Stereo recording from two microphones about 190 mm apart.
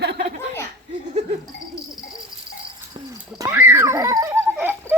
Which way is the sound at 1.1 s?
35° right (ahead or behind).